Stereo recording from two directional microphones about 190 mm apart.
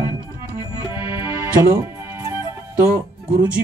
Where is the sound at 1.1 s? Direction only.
15° right (ahead or behind).